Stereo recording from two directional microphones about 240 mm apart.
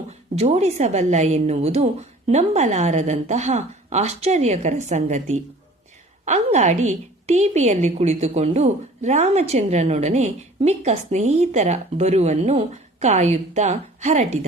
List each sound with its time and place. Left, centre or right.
0.1 s a woman's voice: right